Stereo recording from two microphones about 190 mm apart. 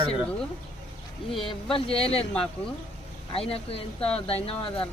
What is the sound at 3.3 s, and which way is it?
Speech, 30° left (ahead or behind).